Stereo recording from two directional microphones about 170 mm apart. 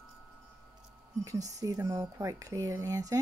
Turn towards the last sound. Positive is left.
turn(degrees=-20)  # may be behind; listen again after turning